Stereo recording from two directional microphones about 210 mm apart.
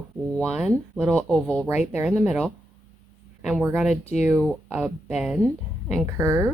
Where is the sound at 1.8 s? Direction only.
10° right (ahead or behind).